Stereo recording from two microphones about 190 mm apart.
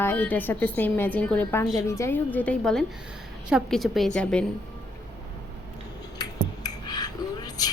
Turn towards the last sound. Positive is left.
turn(degrees=20)  # may be behind; listen again after turning